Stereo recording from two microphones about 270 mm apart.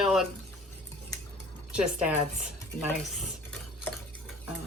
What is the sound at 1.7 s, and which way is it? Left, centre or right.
Speech, centre.